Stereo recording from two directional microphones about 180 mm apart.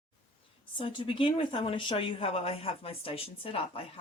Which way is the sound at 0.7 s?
30° left (ahead or behind).